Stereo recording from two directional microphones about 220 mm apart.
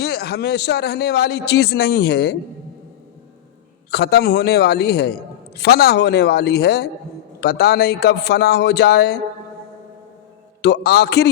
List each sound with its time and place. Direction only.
0.0 s a man's voice: 45° left (ahead or behind)
3.9 s a man's voice: 45° left (ahead or behind)
10.6 s a man's voice: 50° left (ahead or behind)